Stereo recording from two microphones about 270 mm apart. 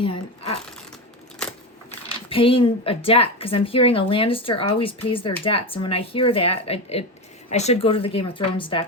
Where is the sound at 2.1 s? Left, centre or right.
Centre.